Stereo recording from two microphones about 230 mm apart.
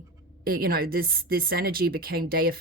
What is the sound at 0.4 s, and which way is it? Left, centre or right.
Speech, right.